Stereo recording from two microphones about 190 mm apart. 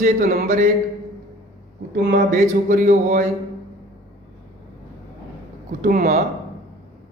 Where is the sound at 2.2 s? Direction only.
40° right (ahead or behind).